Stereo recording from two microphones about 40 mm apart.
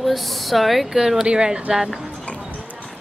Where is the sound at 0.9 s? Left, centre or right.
Centre.